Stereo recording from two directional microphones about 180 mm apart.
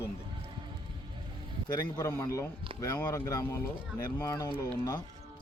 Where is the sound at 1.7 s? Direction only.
20° left (ahead or behind).